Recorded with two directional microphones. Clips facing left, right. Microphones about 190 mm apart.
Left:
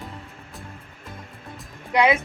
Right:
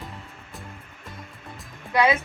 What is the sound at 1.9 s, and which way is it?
Speech, 20° left (ahead or behind).